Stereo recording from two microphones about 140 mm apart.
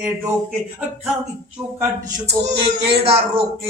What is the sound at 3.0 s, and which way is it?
Speech, 45° right (ahead or behind).